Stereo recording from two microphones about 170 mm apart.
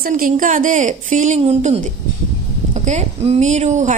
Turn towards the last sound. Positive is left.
turn(degrees=-45)  # may be behind; listen again after turning